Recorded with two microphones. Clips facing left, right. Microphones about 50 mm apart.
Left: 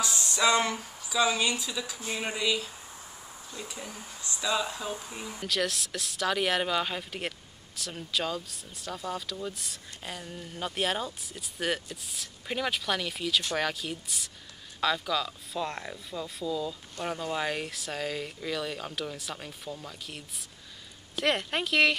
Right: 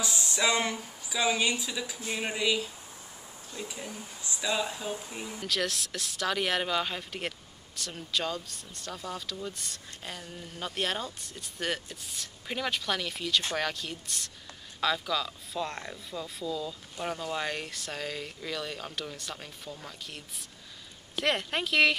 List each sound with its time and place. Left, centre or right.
0.0 s speech: centre